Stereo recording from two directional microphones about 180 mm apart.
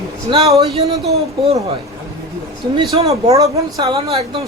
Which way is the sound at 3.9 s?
35° right (ahead or behind).